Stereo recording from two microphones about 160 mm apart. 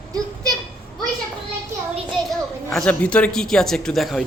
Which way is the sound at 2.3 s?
5° left (ahead or behind).